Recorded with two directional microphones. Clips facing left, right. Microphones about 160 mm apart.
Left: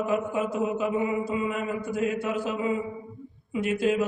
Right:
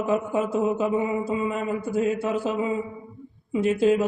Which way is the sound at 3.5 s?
30° right (ahead or behind).